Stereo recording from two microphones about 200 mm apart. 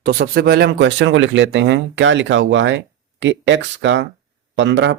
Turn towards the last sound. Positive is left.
turn(degrees=-65)  # may be behind; listen again after turning